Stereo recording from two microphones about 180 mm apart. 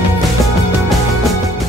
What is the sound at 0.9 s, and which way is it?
Music, centre (ahead or behind).